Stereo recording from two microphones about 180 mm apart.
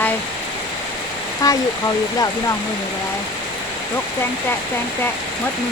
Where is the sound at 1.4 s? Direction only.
20° left (ahead or behind).